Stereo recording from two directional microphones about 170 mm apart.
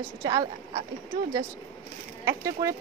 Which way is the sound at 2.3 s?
20° right (ahead or behind).